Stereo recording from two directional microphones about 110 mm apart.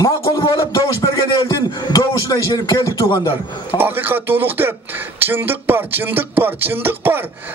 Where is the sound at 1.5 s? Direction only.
35° left (ahead or behind).